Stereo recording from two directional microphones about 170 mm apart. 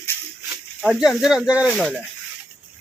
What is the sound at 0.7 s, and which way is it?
Speech, 5° right (ahead or behind).